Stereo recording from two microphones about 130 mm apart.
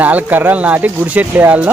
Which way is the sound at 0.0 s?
10° right (ahead or behind).